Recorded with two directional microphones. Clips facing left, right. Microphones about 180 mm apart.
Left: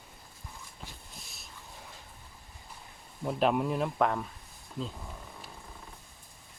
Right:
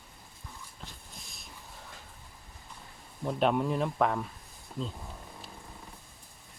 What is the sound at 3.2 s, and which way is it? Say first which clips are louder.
Speech: even; 5° left (ahead or behind).